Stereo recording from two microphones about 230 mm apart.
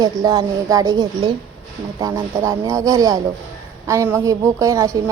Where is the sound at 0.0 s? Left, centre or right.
Centre.